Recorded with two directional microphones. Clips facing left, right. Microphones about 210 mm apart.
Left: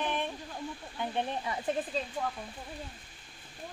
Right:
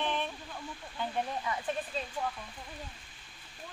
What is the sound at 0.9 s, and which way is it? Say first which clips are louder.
Speech: left 1 dB; 25° left (ahead or behind).